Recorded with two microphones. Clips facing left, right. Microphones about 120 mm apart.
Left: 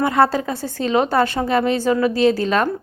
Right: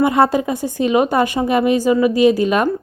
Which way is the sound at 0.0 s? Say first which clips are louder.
Right 2 dB; 15° right (ahead or behind).